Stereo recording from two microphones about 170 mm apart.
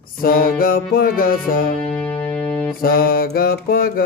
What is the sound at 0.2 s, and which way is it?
Music, 60° left (ahead or behind).